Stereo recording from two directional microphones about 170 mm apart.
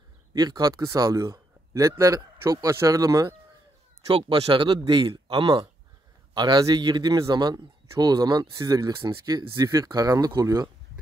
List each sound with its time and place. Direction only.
0.3 s a man's voice: 25° right (ahead or behind)
4.1 s a man's voice: 30° right (ahead or behind)